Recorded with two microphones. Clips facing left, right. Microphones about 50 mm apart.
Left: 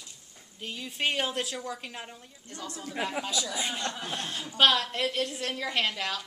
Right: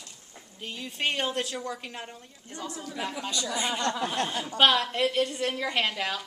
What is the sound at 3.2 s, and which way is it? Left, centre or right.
Speech, centre.